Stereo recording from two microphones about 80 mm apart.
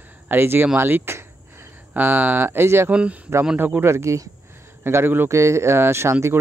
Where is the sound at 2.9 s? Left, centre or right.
Centre.